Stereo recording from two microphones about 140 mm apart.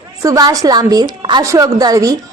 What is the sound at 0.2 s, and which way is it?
A woman's voice, 25° right (ahead or behind).